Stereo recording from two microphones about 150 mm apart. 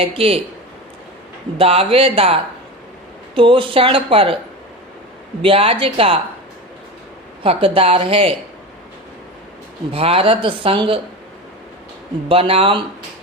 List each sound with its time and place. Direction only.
0.0 s speech: 40° right (ahead or behind)
1.5 s speech: 40° right (ahead or behind)
5.4 s speech: 40° right (ahead or behind)
7.4 s speech: 40° right (ahead or behind)
9.9 s speech: 40° right (ahead or behind)
12.3 s speech: 40° right (ahead or behind)